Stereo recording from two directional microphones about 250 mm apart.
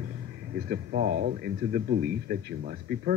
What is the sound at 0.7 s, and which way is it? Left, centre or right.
Speech, right.